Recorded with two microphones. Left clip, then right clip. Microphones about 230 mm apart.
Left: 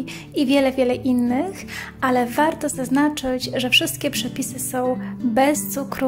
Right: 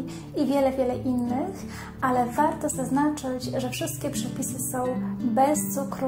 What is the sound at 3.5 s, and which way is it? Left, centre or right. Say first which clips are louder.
Speech: left 16 dB; left.